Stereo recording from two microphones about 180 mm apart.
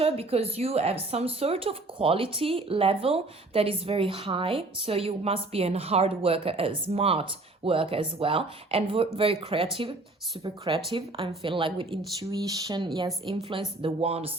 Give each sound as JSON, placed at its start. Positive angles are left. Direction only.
{"t": 0.0, "sound": "speech", "side_deg": -35}
{"t": 10.7, "sound": "speech", "side_deg": -25}